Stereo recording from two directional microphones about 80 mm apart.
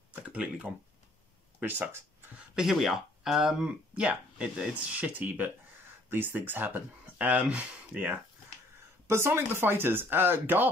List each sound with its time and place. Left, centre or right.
0.1 s a sound: centre
1.6 s speech: centre
2.3 s speech: centre
9.1 s speech: right